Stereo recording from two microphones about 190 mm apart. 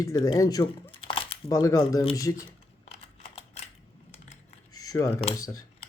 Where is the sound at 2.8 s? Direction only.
30° left (ahead or behind).